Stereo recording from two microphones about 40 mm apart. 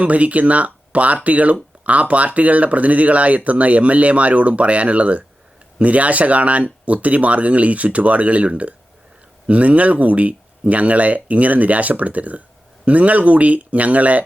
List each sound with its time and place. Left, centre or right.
0.0 s speech: right